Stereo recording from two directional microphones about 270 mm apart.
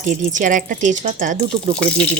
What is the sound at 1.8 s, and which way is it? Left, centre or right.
Speech, centre.